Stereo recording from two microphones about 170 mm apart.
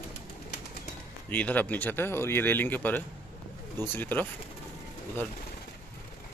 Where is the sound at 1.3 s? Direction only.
10° left (ahead or behind).